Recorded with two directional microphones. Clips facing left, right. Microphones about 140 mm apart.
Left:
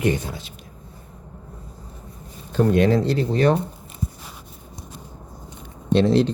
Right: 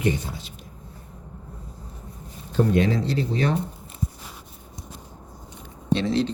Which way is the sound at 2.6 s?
55° left (ahead or behind).